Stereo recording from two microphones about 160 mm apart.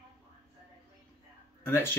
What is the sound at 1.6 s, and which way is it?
Speech, 15° left (ahead or behind).